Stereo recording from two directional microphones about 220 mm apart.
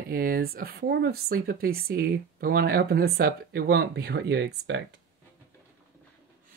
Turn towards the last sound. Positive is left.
turn(degrees=-50)  # may be behind; listen again after turning